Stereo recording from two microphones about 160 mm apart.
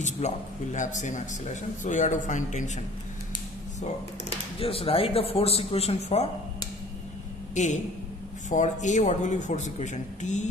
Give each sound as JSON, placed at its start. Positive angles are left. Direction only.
{"t": 0.0, "sound": "a man's voice", "side_deg": 45}
{"t": 4.6, "sound": "speech", "side_deg": 35}
{"t": 7.5, "sound": "a woman's voice", "side_deg": 50}